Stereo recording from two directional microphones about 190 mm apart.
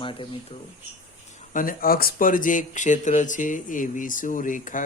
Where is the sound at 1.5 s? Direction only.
50° left (ahead or behind).